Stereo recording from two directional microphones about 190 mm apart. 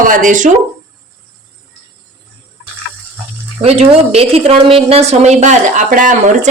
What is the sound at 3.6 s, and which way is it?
Speech, 35° right (ahead or behind).